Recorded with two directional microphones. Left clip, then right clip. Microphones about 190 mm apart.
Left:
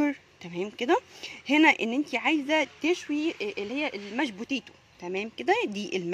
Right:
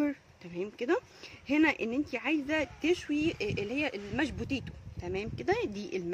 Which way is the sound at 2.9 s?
15° left (ahead or behind).